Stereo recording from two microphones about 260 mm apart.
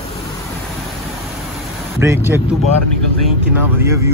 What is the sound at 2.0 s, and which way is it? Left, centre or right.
Speech, centre.